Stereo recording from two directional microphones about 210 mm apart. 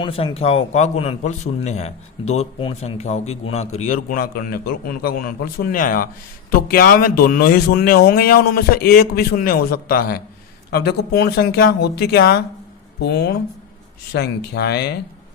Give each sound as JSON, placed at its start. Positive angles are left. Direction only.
{"t": 0.0, "sound": "a man's voice", "side_deg": 25}